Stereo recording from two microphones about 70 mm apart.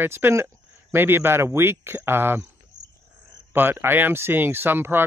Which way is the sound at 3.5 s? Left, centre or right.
Right.